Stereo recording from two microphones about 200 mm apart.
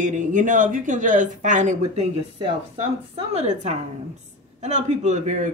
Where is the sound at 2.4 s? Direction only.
30° right (ahead or behind).